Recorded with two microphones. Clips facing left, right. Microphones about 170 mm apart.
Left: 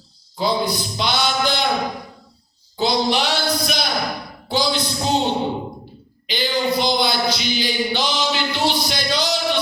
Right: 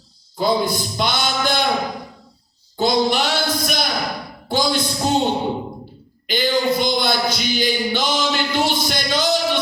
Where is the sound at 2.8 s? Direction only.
50° right (ahead or behind).